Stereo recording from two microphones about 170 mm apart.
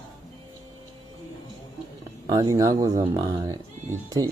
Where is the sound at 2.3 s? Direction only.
25° right (ahead or behind).